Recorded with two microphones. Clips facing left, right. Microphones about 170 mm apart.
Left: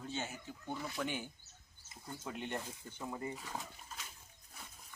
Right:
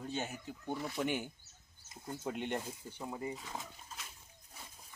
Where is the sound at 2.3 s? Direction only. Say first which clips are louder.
Right 2 dB; 20° right (ahead or behind).